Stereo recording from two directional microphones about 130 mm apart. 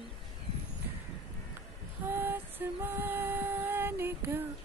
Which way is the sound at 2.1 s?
15° right (ahead or behind).